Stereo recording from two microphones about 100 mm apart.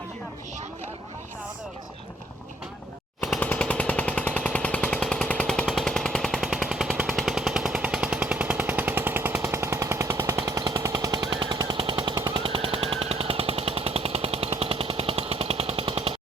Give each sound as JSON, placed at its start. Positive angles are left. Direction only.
{"t": 3.4, "sound": "a sound", "side_deg": 15}
{"t": 7.1, "sound": "machine gun", "side_deg": 0}
{"t": 11.5, "sound": "jackhammer", "side_deg": -40}
{"t": 11.8, "sound": "jackhammer", "side_deg": -55}
{"t": 12.1, "sound": "jackhammer", "side_deg": -40}
{"t": 12.4, "sound": "jackhammer", "side_deg": -65}